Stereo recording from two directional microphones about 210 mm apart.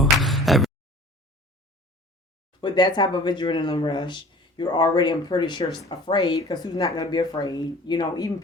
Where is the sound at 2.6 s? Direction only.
20° left (ahead or behind).